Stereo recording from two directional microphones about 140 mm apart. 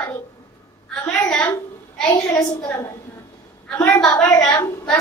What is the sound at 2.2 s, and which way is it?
Speech, 20° left (ahead or behind).